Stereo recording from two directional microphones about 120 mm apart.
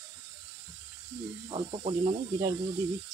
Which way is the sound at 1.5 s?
50° right (ahead or behind).